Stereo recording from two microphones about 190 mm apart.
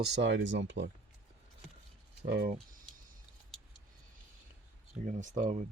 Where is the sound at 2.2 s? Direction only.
60° right (ahead or behind).